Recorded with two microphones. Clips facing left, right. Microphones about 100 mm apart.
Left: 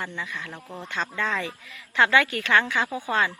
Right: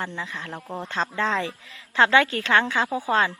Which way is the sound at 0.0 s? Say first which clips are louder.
Right 2 dB; 30° right (ahead or behind).